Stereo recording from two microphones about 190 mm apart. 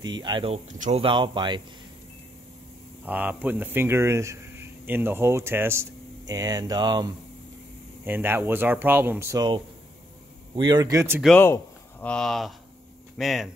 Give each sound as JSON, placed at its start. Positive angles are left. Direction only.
{"t": 0.0, "sound": "speech", "side_deg": -25}
{"t": 3.1, "sound": "speech", "side_deg": -10}
{"t": 8.0, "sound": "speech", "side_deg": -10}
{"t": 11.3, "sound": "speech", "side_deg": 10}